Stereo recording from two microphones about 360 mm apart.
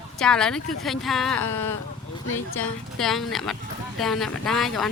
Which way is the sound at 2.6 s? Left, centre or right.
Centre.